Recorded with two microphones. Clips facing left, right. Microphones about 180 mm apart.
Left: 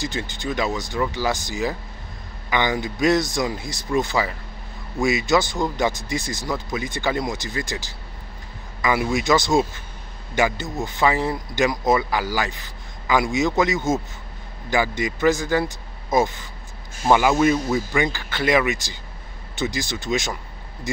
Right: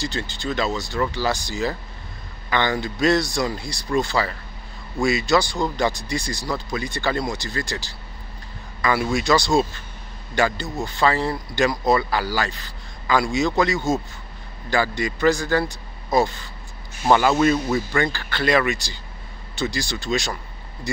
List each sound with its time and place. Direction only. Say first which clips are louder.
0.0 s speech: even; 20° left (ahead or behind)